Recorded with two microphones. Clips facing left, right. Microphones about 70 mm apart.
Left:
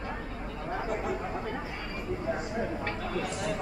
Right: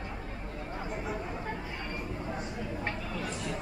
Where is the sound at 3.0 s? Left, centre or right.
Left.